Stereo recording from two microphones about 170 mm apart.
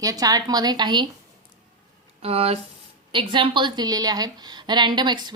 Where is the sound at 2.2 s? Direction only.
35° right (ahead or behind).